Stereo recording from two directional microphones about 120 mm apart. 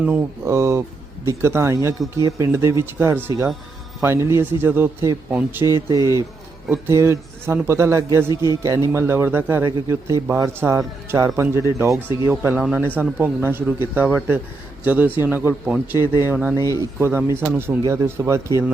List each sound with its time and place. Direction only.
0.0 s speech: 20° right (ahead or behind)
16.6 s speech: 30° left (ahead or behind)
17.0 s speech: 20° right (ahead or behind)